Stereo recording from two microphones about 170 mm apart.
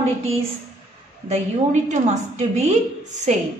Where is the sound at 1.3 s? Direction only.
45° right (ahead or behind).